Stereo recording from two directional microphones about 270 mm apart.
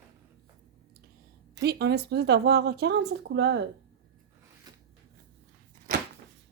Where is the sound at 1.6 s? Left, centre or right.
Right.